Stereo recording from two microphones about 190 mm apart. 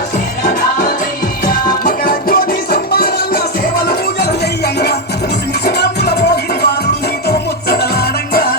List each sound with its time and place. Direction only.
0.4 s music: 45° left (ahead or behind)